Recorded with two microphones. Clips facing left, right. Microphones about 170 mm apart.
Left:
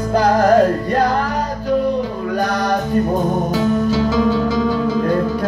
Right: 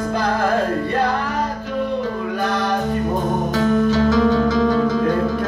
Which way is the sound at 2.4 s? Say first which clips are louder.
Left 3 dB; 40° left (ahead or behind).